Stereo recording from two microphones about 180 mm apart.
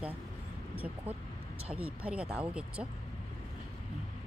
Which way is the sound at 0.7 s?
10° right (ahead or behind).